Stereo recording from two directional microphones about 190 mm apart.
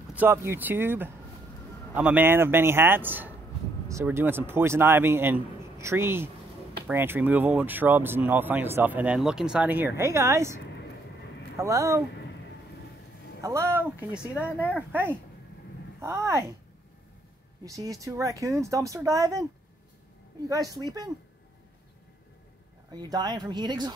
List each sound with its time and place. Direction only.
0.1 s speech: 10° right (ahead or behind)
13.4 s speech: 15° right (ahead or behind)
17.6 s speech: 15° right (ahead or behind)
20.4 s speech: 15° right (ahead or behind)
22.9 s speech: 20° right (ahead or behind)